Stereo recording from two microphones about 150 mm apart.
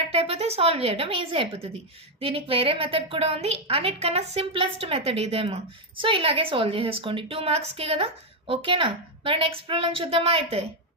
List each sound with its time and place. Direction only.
0.1 s a woman's voice: 40° right (ahead or behind)